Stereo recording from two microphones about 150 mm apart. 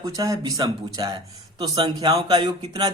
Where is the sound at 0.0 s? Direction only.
20° right (ahead or behind).